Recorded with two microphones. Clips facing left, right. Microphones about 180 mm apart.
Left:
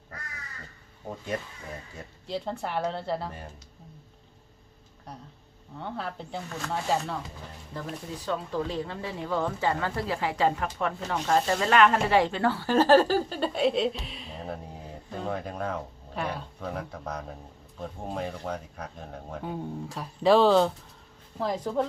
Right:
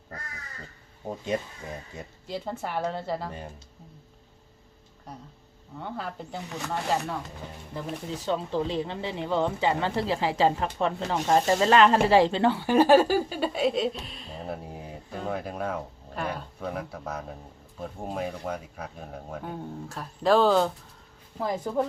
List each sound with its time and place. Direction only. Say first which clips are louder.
1.0 s speech: right 4 dB; 20° right (ahead or behind)
2.2 s speech: left 1 dB; 5° right (ahead or behind)
5.7 s speech: even; centre (ahead or behind)
8.0 s speech: right 4 dB; 25° right (ahead or behind); by 14.6 s centre (ahead or behind)
14.7 s a sound: right 1 dB; 10° right (ahead or behind)
15.2 s speech: right 1 dB; 5° right (ahead or behind)